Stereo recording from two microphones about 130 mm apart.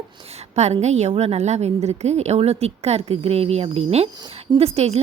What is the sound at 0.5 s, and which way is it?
A woman's voice, 60° right (ahead or behind).